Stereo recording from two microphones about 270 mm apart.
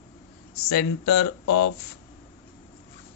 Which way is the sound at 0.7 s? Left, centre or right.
Left.